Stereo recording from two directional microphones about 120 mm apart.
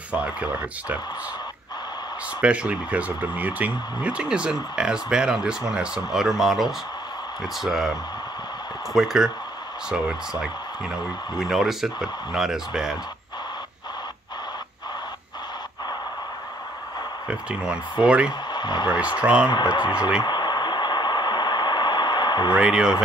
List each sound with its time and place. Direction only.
0.1 s speech: 10° right (ahead or behind)
2.4 s speech: 10° right (ahead or behind)
8.9 s speech: centre (ahead or behind)
17.3 s speech: 10° right (ahead or behind)
18.5 s speech: 35° left (ahead or behind)
18.9 s speech: 10° right (ahead or behind)
19.5 s speech: 35° left (ahead or behind)
20.2 s vehicle: 35° left (ahead or behind)
22.6 s speech: 5° right (ahead or behind)